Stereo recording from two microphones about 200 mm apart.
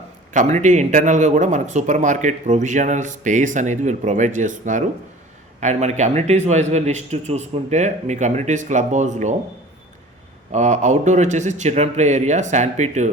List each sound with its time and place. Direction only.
0.3 s speech: 35° right (ahead or behind)
10.5 s speech: 35° right (ahead or behind)